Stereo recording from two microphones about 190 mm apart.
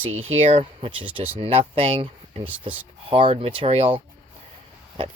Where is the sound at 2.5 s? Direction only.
10° right (ahead or behind).